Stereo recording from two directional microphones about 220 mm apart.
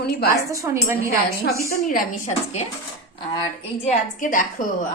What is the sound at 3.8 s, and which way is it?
Speech, 35° left (ahead or behind).